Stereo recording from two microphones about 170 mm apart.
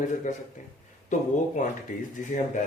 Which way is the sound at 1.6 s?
45° left (ahead or behind).